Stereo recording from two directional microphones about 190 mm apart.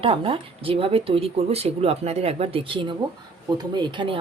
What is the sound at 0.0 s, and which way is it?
A woman's voice, 30° right (ahead or behind).